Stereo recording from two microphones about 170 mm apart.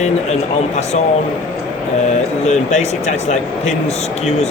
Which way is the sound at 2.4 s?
40° left (ahead or behind).